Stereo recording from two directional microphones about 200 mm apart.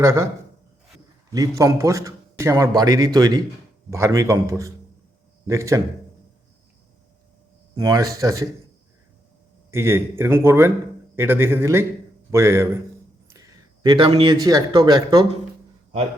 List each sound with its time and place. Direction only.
0.0 s a man's voice: 15° right (ahead or behind)
1.3 s a man's voice: 15° right (ahead or behind)
7.8 s a man's voice: 15° right (ahead or behind)
9.7 s a man's voice: 10° right (ahead or behind)